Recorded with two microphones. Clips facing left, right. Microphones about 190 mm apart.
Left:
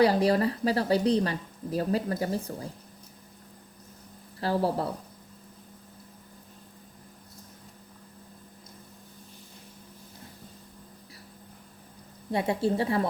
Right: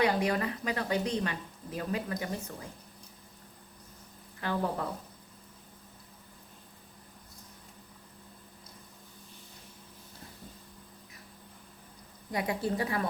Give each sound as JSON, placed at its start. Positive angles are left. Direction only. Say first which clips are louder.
{"t": 0.0, "sound": "speech", "louder": "left 6 dB", "side_deg": 35}
{"t": 4.4, "sound": "speech", "louder": "left 5 dB", "side_deg": 35}
{"t": 12.3, "sound": "a woman's voice", "louder": "left 5 dB", "side_deg": 30}